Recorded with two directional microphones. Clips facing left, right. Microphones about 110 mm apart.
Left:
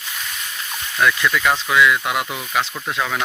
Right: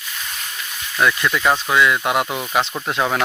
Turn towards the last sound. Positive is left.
turn(degrees=-25)  # may be behind; listen again after turning